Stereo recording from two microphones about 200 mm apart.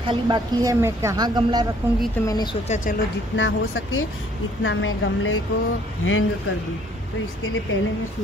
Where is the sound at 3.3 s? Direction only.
75° left (ahead or behind).